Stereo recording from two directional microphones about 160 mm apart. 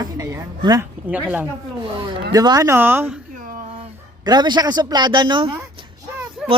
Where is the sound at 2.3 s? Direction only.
25° right (ahead or behind).